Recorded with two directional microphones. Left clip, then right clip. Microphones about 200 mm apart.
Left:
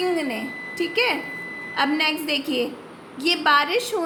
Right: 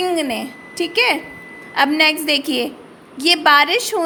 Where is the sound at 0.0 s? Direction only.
45° right (ahead or behind).